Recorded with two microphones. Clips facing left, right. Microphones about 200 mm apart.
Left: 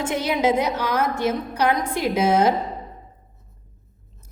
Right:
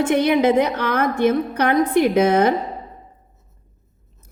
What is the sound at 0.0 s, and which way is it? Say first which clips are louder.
A woman's voice: right 6 dB; 60° right (ahead or behind).